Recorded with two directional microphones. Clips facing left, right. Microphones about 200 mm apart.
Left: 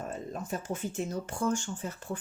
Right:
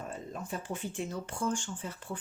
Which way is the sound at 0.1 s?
40° left (ahead or behind).